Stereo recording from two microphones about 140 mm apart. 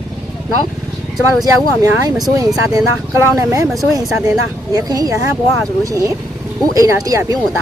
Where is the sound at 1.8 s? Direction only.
25° right (ahead or behind).